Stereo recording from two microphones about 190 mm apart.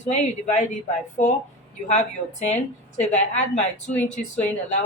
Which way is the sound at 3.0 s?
40° left (ahead or behind).